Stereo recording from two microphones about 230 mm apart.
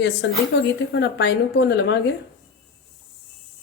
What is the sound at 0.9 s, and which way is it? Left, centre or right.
A woman's voice, left.